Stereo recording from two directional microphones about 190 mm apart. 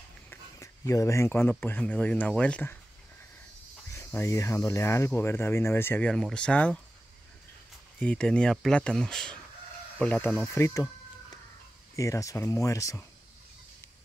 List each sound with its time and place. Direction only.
0.3 s speech: 15° left (ahead or behind)
3.9 s speech: 15° left (ahead or behind)
8.0 s speech: 5° left (ahead or behind)
10.4 s chicken: 15° left (ahead or behind)
11.9 s speech: 15° left (ahead or behind)